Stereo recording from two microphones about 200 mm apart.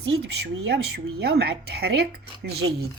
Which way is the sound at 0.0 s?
60° right (ahead or behind).